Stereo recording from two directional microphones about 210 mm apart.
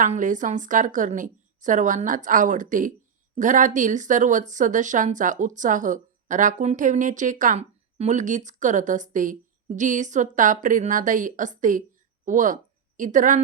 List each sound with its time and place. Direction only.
0.0 s speech: 40° right (ahead or behind)